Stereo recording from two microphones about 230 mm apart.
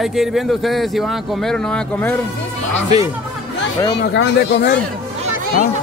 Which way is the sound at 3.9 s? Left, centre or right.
Left.